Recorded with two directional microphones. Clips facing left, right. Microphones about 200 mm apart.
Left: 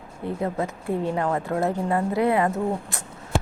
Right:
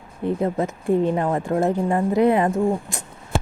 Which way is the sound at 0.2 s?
20° right (ahead or behind).